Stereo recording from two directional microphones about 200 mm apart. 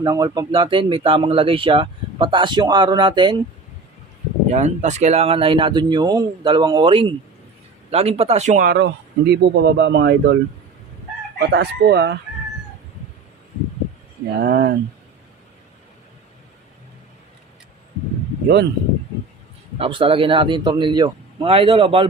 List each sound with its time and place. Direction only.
0.0 s speech: 20° right (ahead or behind)
4.5 s speech: 35° right (ahead or behind); by 10.3 s 60° right (ahead or behind)
11.3 s speech: 55° right (ahead or behind)
14.3 s speech: 55° right (ahead or behind)
18.4 s speech: 55° right (ahead or behind)
19.8 s speech: 25° right (ahead or behind)